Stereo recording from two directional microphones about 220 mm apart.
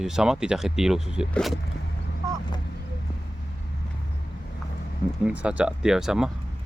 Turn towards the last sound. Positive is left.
turn(degrees=-5)  # may be behind; listen again after turning